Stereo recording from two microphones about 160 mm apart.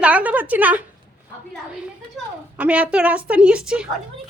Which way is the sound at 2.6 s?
10° right (ahead or behind).